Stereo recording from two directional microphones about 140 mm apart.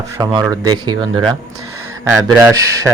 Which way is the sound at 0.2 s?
35° right (ahead or behind).